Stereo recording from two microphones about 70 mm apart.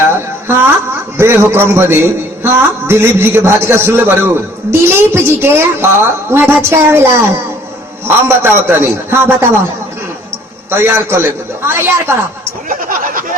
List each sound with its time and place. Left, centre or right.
0.0 s music: right
1.1 s a man's voice: right
10.7 s a man's voice: right